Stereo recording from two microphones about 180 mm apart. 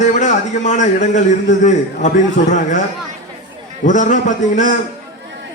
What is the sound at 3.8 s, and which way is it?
Speech, 45° left (ahead or behind).